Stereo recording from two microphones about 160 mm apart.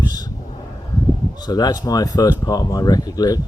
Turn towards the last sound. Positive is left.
turn(degrees=25)  # may be behind; listen again after turning